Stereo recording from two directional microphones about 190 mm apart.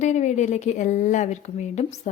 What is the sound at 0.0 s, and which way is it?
A woman's voice, 40° left (ahead or behind).